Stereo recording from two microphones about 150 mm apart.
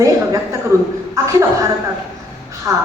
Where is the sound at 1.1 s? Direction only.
20° right (ahead or behind).